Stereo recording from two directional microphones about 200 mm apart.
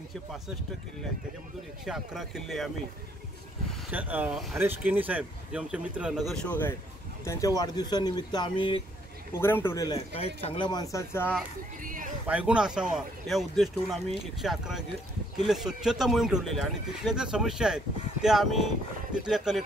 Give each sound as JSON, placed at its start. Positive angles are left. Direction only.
{"t": 1.9, "sound": "speech", "side_deg": 0}
{"t": 3.9, "sound": "speech", "side_deg": -10}
{"t": 9.4, "sound": "speech", "side_deg": 10}
{"t": 9.9, "sound": "speech", "side_deg": 30}
{"t": 11.8, "sound": "a sound", "side_deg": -40}
{"t": 12.3, "sound": "speech", "side_deg": -5}